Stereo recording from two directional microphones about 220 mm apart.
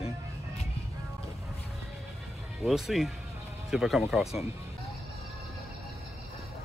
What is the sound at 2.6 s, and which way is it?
Speech, centre (ahead or behind).